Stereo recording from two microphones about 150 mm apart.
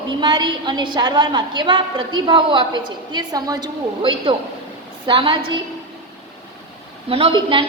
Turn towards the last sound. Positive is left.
turn(degrees=-35)  # may be behind; listen again after turning